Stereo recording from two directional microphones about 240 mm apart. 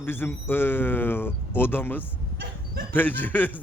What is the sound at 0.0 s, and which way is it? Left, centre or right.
A man's voice, centre.